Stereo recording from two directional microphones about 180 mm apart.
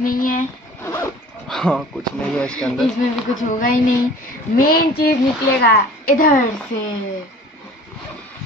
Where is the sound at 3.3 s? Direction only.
45° left (ahead or behind).